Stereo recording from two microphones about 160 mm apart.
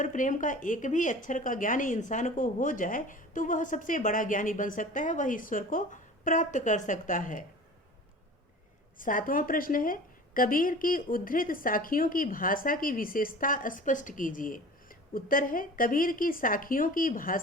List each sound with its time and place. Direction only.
0.0 s a woman's voice: 50° left (ahead or behind)
9.0 s a woman's voice: 55° left (ahead or behind)